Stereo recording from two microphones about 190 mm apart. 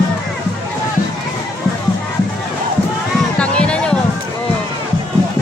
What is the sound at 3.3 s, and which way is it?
Music, 5° left (ahead or behind).